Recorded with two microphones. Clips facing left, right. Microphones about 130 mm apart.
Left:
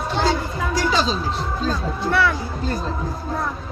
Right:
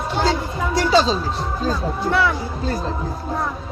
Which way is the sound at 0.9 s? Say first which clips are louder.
Right 9 dB; 35° right (ahead or behind).